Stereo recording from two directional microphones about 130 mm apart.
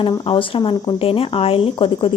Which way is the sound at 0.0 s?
40° left (ahead or behind).